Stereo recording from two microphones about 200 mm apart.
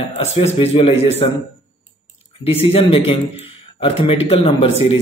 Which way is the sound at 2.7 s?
25° left (ahead or behind).